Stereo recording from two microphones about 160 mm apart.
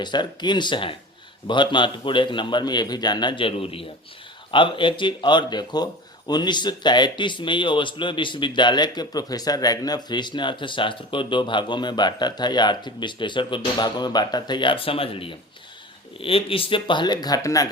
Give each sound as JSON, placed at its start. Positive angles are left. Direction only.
{"t": 0.0, "sound": "speech", "side_deg": 30}